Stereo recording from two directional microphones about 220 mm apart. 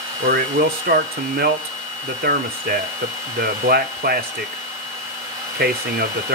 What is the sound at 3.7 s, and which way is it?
Speech, 45° right (ahead or behind).